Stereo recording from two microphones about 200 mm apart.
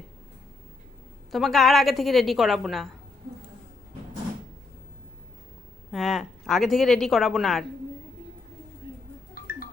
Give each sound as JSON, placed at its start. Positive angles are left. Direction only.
{"t": 1.3, "sound": "speech", "side_deg": 0}
{"t": 5.9, "sound": "speech", "side_deg": 0}
{"t": 9.4, "sound": "music", "side_deg": 45}